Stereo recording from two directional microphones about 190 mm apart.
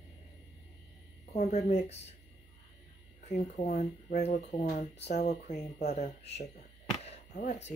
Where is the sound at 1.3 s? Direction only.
35° left (ahead or behind).